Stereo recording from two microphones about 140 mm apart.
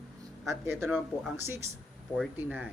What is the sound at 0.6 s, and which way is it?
Speech, 15° right (ahead or behind).